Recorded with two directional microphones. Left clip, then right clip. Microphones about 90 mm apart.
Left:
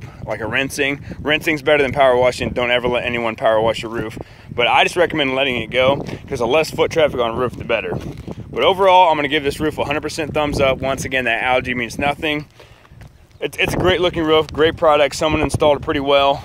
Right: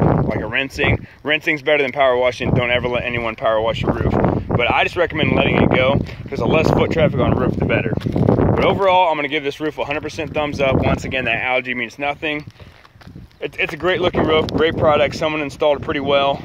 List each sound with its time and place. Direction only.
0.3 s speech: 40° left (ahead or behind)
6.4 s speech: 50° left (ahead or behind)
6.8 s speech: 35° left (ahead or behind)
13.4 s speech: 40° left (ahead or behind)